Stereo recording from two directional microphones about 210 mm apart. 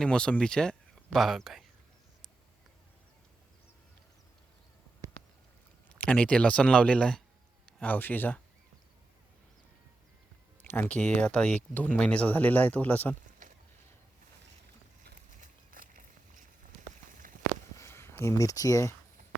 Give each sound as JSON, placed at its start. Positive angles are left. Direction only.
{"t": 0.0, "sound": "speech", "side_deg": 5}
{"t": 6.1, "sound": "speech", "side_deg": 5}
{"t": 10.6, "sound": "speech", "side_deg": 10}
{"t": 15.0, "sound": "a sound", "side_deg": -40}
{"t": 17.7, "sound": "speech", "side_deg": 10}